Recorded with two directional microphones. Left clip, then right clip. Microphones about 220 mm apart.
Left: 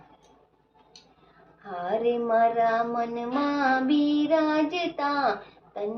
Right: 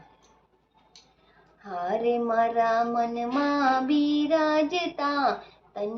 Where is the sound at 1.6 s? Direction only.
15° right (ahead or behind).